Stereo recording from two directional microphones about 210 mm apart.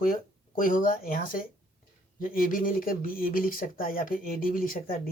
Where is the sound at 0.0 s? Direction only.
40° left (ahead or behind).